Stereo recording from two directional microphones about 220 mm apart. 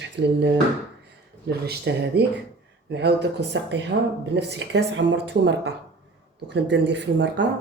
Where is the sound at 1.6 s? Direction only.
45° right (ahead or behind).